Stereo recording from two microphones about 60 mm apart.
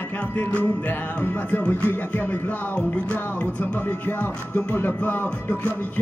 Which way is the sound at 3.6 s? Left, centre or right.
Left.